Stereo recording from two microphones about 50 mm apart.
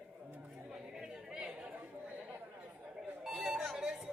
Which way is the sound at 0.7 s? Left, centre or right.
Centre.